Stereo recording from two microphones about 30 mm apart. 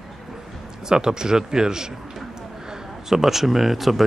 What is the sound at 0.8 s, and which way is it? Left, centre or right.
Speech, right.